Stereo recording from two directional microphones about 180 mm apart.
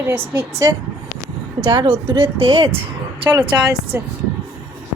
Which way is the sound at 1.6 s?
25° right (ahead or behind).